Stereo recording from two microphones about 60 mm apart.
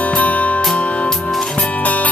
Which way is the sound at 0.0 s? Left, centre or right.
Left.